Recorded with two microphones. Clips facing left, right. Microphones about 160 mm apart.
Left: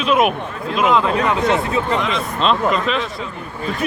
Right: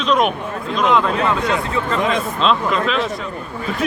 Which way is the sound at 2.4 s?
Centre (ahead or behind).